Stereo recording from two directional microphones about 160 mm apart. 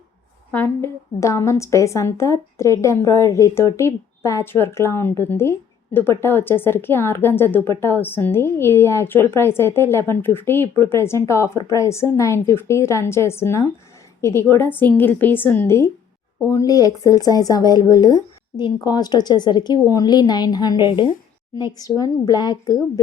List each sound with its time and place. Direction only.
0.5 s a woman's voice: 15° left (ahead or behind)